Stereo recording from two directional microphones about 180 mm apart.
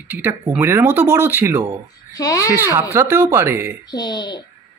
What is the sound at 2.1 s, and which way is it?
Speech, 20° left (ahead or behind).